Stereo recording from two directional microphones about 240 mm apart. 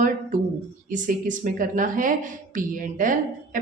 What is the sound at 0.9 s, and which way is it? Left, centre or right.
A woman's voice, right.